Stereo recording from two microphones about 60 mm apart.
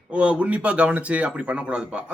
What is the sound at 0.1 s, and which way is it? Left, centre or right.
Speech, centre.